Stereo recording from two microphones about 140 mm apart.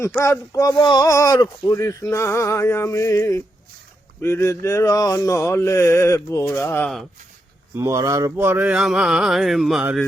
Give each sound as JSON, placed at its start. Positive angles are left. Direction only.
{"t": 0.2, "sound": "speech", "side_deg": 25}
{"t": 7.8, "sound": "speech", "side_deg": -20}